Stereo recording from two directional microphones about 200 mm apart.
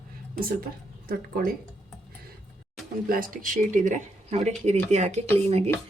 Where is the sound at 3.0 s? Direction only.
45° right (ahead or behind).